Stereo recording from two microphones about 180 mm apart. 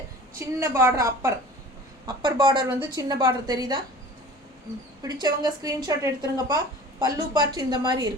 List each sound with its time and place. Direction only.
0.3 s a woman's voice: 15° right (ahead or behind)
5.0 s a woman's voice: 20° right (ahead or behind)